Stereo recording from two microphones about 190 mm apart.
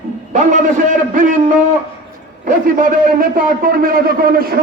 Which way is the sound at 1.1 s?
45° right (ahead or behind).